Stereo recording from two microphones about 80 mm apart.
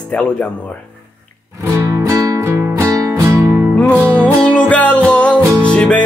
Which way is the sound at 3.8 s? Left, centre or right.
Centre.